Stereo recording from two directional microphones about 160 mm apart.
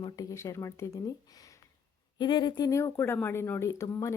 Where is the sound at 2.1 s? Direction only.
30° left (ahead or behind).